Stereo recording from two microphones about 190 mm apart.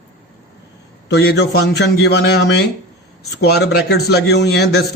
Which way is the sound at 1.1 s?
60° left (ahead or behind).